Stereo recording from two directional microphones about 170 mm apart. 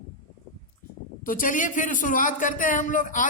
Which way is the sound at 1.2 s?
50° left (ahead or behind).